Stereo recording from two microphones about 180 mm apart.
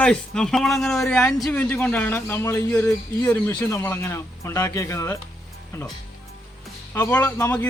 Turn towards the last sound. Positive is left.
turn(degrees=10)  # may be behind; listen again after turning